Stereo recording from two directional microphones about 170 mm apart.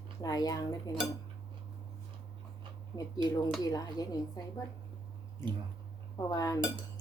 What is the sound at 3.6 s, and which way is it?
Speech, 20° left (ahead or behind).